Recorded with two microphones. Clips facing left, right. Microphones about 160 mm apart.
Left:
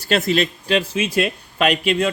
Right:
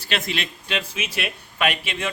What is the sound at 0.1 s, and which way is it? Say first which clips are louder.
A man's voice: left 9 dB; 40° left (ahead or behind).